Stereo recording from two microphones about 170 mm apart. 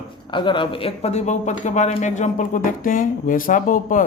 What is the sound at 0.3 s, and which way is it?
Speech, 30° left (ahead or behind).